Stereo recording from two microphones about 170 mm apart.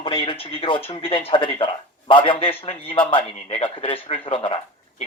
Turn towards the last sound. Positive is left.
turn(degrees=30)  # may be behind; listen again after turning